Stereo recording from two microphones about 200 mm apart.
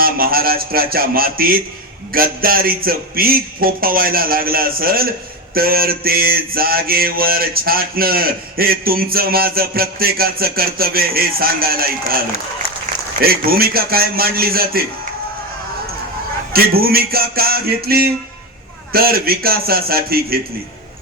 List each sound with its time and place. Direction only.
0.0 s mantra: 45° right (ahead or behind)
13.2 s mantra: 50° right (ahead or behind)
16.5 s mantra: 50° right (ahead or behind)